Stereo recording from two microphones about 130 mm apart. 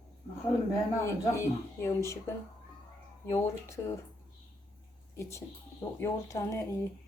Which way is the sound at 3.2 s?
20° left (ahead or behind).